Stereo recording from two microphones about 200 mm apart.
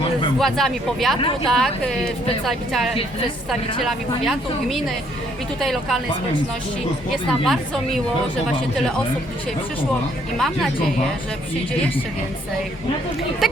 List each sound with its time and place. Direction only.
0.3 s speech: centre (ahead or behind)
7.1 s speech: centre (ahead or behind)
10.3 s speech: centre (ahead or behind)
13.4 s speech: centre (ahead or behind)